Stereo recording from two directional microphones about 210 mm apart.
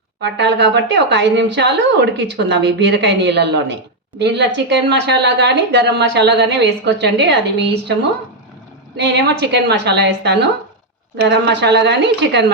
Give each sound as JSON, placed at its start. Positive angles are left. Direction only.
{"t": 0.2, "sound": "a woman's voice", "side_deg": -55}
{"t": 9.0, "sound": "a woman's voice", "side_deg": -55}